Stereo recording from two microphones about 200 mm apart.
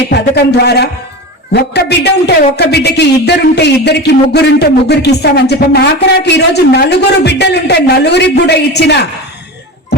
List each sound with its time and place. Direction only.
0.1 s speech: 55° left (ahead or behind)